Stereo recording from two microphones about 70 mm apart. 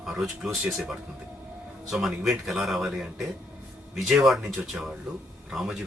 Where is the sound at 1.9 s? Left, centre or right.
Centre.